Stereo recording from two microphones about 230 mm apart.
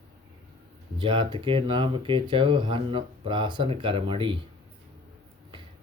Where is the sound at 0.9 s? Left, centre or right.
Right.